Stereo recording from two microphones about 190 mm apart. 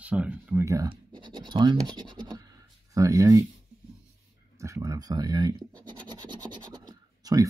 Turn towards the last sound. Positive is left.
turn(degrees=-20)  # may be behind; listen again after turning